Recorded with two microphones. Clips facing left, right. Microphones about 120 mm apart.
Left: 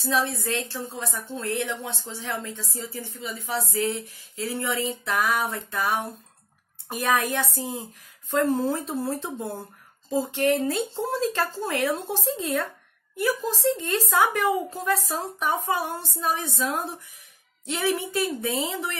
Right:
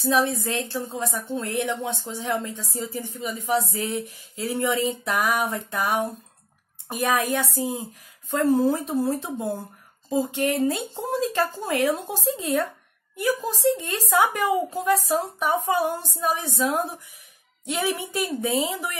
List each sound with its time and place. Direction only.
0.0 s a woman's voice: 20° right (ahead or behind)
8.6 s a woman's voice: 15° right (ahead or behind)